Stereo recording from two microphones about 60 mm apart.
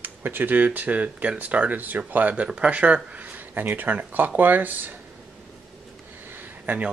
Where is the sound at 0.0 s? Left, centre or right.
Right.